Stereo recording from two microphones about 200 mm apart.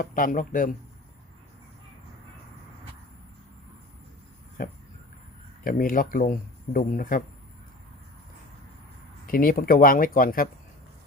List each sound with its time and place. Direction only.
0.0 s speech: 45° left (ahead or behind)
4.6 s speech: 45° left (ahead or behind)
9.2 s speech: 45° left (ahead or behind)